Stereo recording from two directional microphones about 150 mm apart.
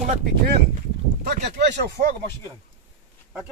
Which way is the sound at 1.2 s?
85° right.